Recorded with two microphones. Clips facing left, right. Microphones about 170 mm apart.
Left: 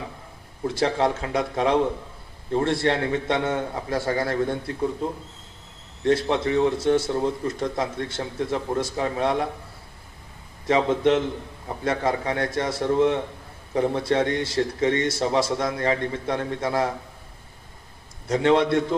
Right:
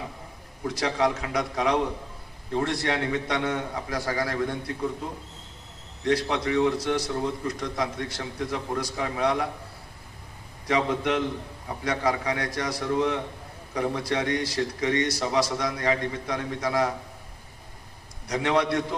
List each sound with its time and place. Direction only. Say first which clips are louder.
0.7 s a man's voice: left 3 dB; 25° left (ahead or behind)
6.0 s a man's voice: left 4 dB; 25° left (ahead or behind)
10.7 s a man's voice: left 5 dB; 25° left (ahead or behind)
18.2 s a man's voice: left 5 dB; 25° left (ahead or behind)